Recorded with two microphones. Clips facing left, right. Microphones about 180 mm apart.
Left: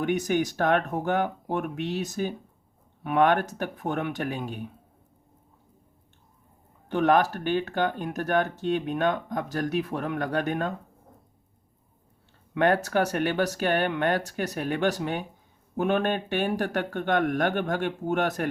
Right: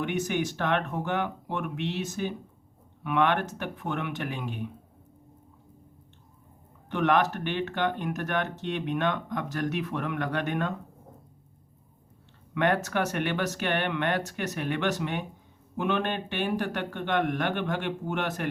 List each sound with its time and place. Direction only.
0.0 s speech: 40° left (ahead or behind)
6.8 s speech: 35° left (ahead or behind)
12.5 s speech: 35° left (ahead or behind)